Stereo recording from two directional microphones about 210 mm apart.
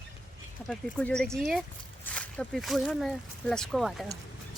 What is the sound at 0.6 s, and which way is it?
A woman's voice, 5° left (ahead or behind).